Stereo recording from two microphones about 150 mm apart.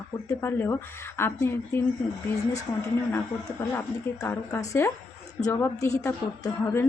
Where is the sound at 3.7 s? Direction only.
20° left (ahead or behind).